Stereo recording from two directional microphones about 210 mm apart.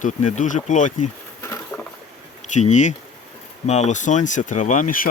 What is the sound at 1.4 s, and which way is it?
Patter, 15° left (ahead or behind).